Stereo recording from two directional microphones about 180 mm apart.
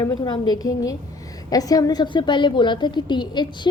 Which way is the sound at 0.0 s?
25° left (ahead or behind).